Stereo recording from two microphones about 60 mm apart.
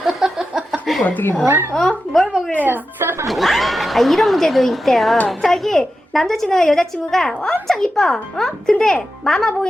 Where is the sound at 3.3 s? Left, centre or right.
Centre.